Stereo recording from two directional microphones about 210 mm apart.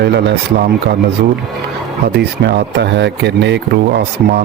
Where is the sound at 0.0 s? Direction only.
55° right (ahead or behind).